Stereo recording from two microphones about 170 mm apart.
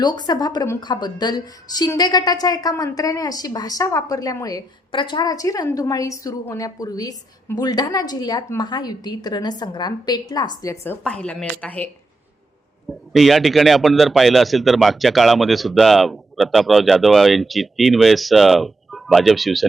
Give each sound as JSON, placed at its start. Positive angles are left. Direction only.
{"t": 0.0, "sound": "a woman's voice", "side_deg": 25}
{"t": 11.0, "sound": "speech", "side_deg": 5}
{"t": 12.9, "sound": "a man's voice", "side_deg": 0}